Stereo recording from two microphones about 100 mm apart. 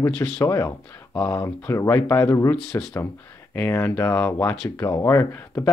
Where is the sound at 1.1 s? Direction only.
15° left (ahead or behind).